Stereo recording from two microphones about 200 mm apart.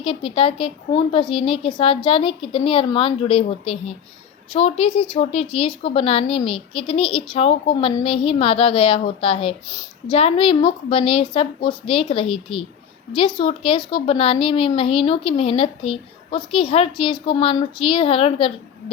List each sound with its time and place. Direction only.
0.0 s a child's voice: 25° left (ahead or behind)